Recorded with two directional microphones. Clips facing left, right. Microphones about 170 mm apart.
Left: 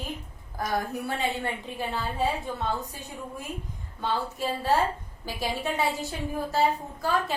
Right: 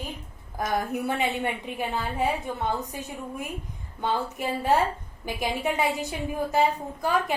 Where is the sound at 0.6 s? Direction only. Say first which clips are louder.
Right 2 dB; 20° right (ahead or behind).